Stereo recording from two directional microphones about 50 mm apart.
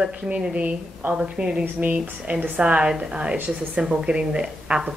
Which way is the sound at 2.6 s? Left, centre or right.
Right.